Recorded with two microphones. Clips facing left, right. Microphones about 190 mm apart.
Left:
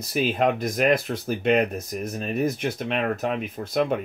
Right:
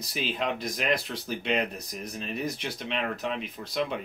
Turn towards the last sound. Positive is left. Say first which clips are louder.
# left 7 dB
turn(degrees=50)  # may be behind; listen again after turning